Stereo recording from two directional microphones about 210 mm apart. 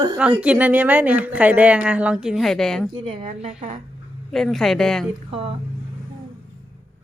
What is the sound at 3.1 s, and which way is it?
Speech, 25° right (ahead or behind).